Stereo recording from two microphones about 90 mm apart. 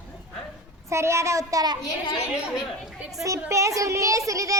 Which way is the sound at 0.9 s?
30° right (ahead or behind).